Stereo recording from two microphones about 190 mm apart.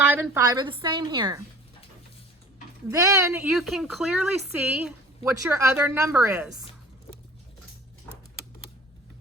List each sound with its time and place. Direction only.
0.2 s a woman's voice: 15° right (ahead or behind)
2.9 s a woman's voice: 15° right (ahead or behind)